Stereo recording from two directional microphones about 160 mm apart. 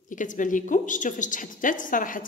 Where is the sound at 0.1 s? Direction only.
55° left (ahead or behind).